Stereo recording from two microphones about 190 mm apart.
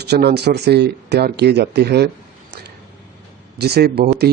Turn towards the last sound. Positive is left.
turn(degrees=-55)  # may be behind; listen again after turning